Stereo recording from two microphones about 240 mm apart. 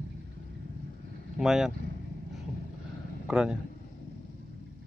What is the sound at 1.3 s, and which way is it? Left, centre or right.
Speech, centre.